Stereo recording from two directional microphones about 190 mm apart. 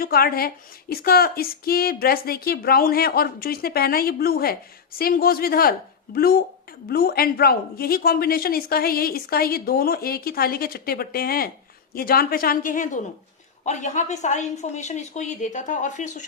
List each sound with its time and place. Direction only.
0.0 s a woman's voice: 50° left (ahead or behind)